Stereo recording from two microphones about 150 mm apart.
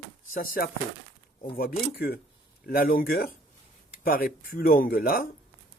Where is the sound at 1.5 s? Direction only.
85° left.